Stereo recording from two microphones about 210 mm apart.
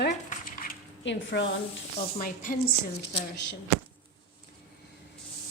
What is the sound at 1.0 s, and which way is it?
Speech, 60° left (ahead or behind).